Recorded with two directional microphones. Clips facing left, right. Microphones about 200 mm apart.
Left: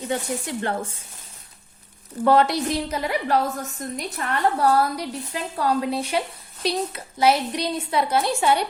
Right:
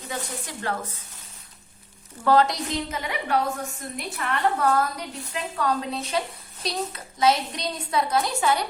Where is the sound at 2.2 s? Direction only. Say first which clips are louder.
Left 2 dB; 25° left (ahead or behind).